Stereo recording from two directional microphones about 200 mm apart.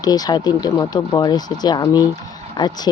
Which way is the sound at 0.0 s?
20° left (ahead or behind).